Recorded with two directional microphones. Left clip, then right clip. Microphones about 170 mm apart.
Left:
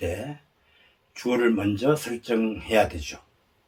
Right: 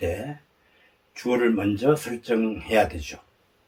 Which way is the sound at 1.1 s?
5° right (ahead or behind).